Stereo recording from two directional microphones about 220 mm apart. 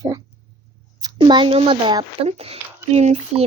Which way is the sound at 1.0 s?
20° right (ahead or behind).